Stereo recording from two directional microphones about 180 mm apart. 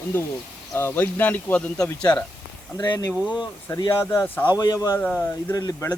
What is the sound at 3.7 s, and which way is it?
Speech, 15° left (ahead or behind).